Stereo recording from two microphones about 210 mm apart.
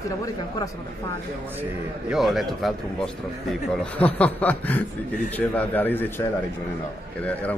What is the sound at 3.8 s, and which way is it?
A man's voice, 5° left (ahead or behind).